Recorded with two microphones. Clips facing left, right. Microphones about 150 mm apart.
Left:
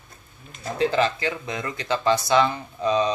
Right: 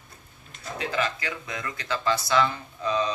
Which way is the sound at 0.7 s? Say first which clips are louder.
Left 7 dB; 30° left (ahead or behind).